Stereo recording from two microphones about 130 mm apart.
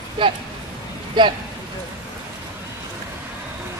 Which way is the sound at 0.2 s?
40° right (ahead or behind).